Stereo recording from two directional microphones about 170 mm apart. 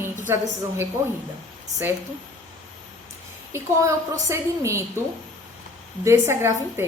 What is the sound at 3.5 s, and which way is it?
A woman's voice, 15° right (ahead or behind).